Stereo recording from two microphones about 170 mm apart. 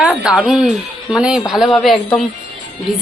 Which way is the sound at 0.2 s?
5° right (ahead or behind).